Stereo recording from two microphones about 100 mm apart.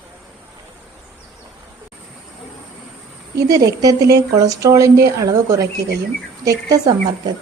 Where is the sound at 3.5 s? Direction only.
35° right (ahead or behind).